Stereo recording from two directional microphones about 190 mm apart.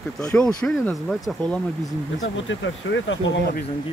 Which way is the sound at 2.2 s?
80° left.